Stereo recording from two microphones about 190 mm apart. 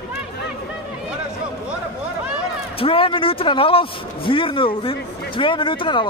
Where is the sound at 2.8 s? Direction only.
30° left (ahead or behind).